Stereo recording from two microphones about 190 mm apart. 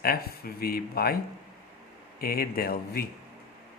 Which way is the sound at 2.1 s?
50° left (ahead or behind).